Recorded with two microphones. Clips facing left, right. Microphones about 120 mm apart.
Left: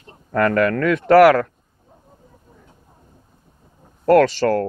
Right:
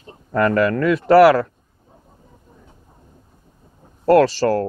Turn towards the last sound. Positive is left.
turn(degrees=-35)  # may be behind; listen again after turning